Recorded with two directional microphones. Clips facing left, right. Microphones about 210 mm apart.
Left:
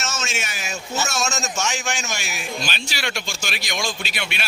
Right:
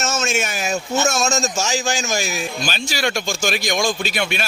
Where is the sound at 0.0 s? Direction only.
50° right (ahead or behind).